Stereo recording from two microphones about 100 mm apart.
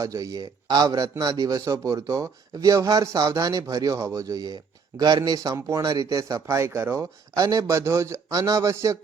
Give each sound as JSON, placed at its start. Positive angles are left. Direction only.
{"t": 0.0, "sound": "speech", "side_deg": -35}